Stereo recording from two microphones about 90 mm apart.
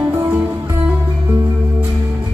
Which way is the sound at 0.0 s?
25° right (ahead or behind).